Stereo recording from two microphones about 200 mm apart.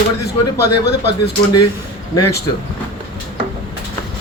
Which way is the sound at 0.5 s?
55° left (ahead or behind).